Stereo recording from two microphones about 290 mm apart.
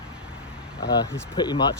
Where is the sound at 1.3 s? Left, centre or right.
Centre.